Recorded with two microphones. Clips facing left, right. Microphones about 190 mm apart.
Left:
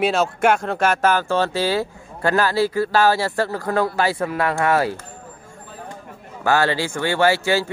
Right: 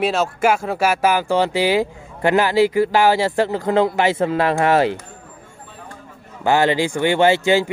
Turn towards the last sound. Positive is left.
turn(degrees=-20)  # may be behind; listen again after turning